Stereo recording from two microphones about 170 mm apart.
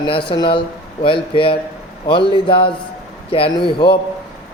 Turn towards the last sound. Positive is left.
turn(degrees=30)  # may be behind; listen again after turning